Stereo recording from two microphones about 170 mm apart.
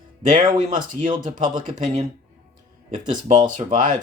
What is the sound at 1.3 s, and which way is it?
Speech, 50° right (ahead or behind).